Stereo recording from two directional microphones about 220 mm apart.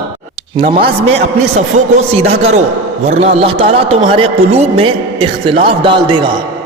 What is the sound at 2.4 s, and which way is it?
A man's voice, 30° right (ahead or behind).